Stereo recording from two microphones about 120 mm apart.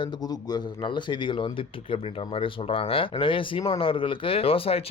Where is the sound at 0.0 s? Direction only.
35° left (ahead or behind).